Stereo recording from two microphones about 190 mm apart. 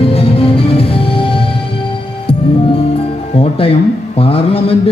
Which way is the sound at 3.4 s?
30° left (ahead or behind).